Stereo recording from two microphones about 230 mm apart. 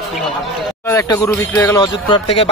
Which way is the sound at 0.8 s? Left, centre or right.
Centre.